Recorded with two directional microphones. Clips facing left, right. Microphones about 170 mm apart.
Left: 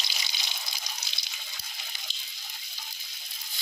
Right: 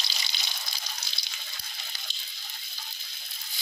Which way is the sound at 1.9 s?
20° left (ahead or behind).